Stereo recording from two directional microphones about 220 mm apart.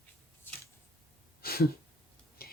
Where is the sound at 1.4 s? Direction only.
45° left (ahead or behind).